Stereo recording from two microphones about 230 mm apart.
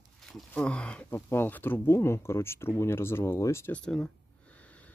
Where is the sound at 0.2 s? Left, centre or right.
Centre.